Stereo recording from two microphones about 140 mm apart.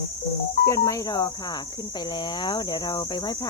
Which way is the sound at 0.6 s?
20° left (ahead or behind).